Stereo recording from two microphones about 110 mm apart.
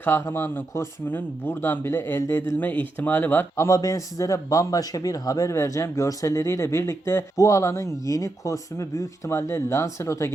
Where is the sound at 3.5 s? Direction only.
30° left (ahead or behind).